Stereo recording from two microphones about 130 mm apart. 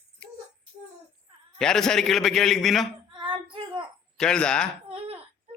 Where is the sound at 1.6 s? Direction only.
5° left (ahead or behind).